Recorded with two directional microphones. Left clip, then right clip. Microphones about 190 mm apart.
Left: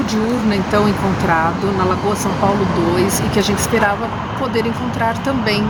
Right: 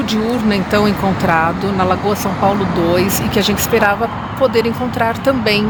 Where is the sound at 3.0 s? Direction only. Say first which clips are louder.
Right 1 dB; 45° right (ahead or behind).